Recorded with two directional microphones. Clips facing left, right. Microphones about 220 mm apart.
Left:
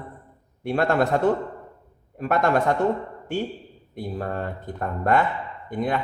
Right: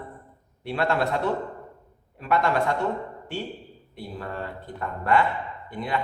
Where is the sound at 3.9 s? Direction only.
45° left (ahead or behind).